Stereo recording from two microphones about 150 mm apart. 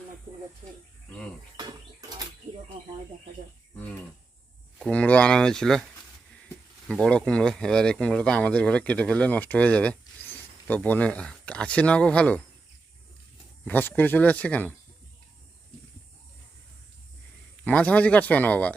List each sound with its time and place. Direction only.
1.5 s a sound: 25° right (ahead or behind)
4.8 s speech: 10° left (ahead or behind)
13.7 s speech: 10° left (ahead or behind)
17.6 s speech: 10° left (ahead or behind)